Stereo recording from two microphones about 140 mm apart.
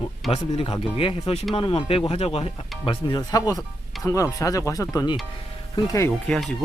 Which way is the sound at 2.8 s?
30° left (ahead or behind).